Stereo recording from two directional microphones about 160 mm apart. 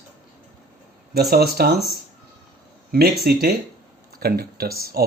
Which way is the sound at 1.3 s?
75° right (ahead or behind).